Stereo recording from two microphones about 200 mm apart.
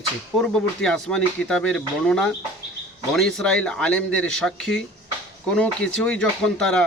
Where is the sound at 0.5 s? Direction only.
5° left (ahead or behind).